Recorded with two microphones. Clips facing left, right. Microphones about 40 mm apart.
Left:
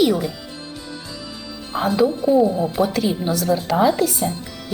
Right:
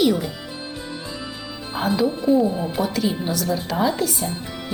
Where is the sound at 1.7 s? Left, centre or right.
Centre.